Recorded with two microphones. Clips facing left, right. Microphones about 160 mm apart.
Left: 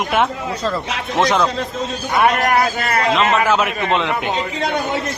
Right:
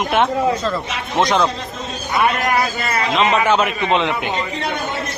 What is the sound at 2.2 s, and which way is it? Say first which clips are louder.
Speech: left 3 dB; 60° left (ahead or behind).